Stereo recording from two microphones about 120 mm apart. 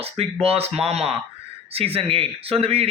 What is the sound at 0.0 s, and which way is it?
Speech, 55° right (ahead or behind).